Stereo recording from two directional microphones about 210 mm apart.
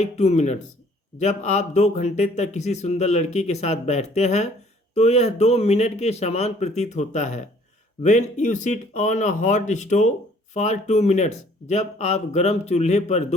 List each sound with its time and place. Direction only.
0.0 s speech: 30° left (ahead or behind)